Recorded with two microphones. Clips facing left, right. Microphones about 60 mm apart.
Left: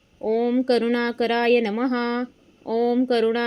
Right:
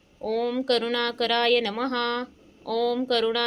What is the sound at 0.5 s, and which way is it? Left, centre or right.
Speech, left.